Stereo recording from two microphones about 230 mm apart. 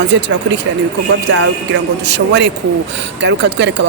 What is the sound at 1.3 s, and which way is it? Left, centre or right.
Speech, right.